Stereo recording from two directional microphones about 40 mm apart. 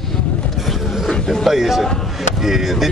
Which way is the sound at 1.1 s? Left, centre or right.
Centre.